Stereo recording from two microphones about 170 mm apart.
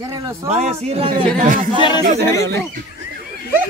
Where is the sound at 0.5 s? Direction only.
40° right (ahead or behind).